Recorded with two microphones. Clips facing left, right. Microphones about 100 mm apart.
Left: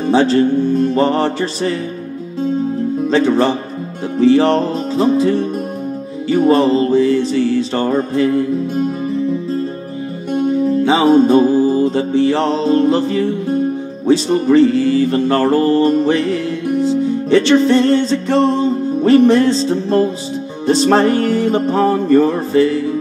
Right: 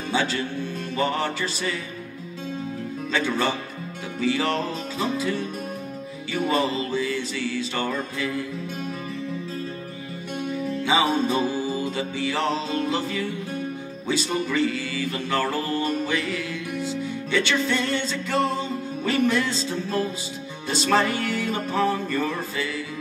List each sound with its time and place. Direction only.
0.0 s music: 35° left (ahead or behind)
3.1 s music: 40° left (ahead or behind)
10.3 s music: 40° left (ahead or behind)